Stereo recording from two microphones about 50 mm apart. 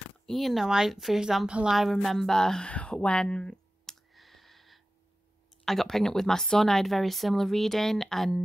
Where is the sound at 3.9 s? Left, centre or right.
Centre.